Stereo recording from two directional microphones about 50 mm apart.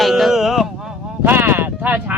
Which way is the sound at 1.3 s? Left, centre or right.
Right.